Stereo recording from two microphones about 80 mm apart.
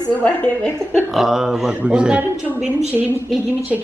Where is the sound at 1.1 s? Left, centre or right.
Centre.